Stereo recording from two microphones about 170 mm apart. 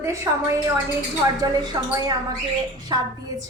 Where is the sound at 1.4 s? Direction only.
20° right (ahead or behind).